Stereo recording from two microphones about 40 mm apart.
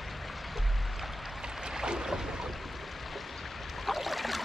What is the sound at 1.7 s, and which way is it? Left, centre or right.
Boat, centre.